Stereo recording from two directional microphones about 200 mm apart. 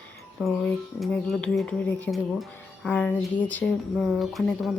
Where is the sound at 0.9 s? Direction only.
Centre (ahead or behind).